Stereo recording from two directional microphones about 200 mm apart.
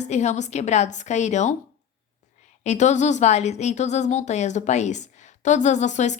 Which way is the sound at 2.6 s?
35° left (ahead or behind).